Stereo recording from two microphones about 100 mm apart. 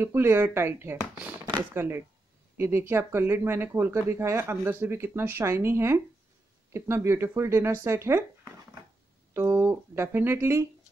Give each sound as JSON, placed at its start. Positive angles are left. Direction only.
{"t": 0.0, "sound": "speech", "side_deg": -25}
{"t": 9.6, "sound": "speech", "side_deg": -20}